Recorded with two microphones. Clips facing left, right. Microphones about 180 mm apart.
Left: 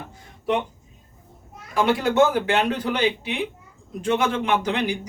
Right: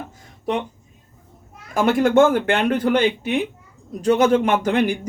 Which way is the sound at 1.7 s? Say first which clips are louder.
Right 4 dB; 45° right (ahead or behind).